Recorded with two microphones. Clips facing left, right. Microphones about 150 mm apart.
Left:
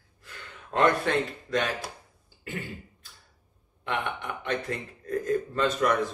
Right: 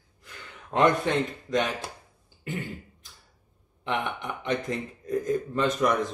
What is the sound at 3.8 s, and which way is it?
Speech, 15° right (ahead or behind).